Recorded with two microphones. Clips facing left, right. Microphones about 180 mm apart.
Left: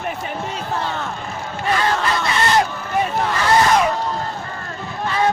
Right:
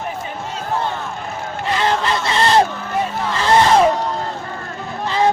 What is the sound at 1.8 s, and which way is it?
Honk, 30° right (ahead or behind).